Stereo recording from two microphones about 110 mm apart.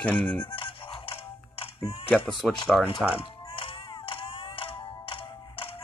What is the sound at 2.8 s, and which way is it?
Music, 55° left (ahead or behind).